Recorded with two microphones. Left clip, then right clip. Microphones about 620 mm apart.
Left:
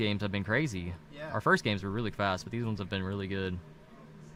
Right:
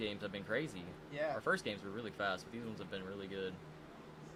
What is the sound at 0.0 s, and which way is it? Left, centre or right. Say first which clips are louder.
Speech: left 9 dB; left.